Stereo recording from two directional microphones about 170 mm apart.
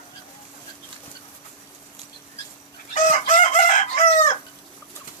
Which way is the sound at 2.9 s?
50° left (ahead or behind).